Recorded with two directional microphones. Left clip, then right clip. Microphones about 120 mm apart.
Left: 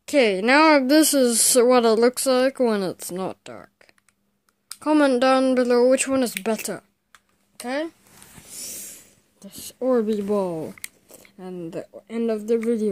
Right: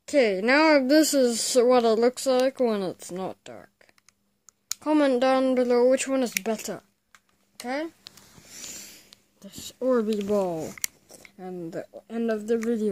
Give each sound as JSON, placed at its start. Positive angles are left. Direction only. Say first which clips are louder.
{"t": 0.0, "sound": "speech", "louder": "left 3 dB", "side_deg": 10}
{"t": 8.5, "sound": "a sound", "louder": "left 3 dB", "side_deg": -30}
{"t": 9.4, "sound": "speech", "louder": "left 2 dB", "side_deg": 0}
{"t": 11.1, "sound": "scissors", "louder": "left 1 dB", "side_deg": 5}
{"t": 11.7, "sound": "speech", "louder": "left 3 dB", "side_deg": 5}